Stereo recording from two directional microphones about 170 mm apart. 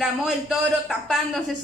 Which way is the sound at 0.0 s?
Centre (ahead or behind).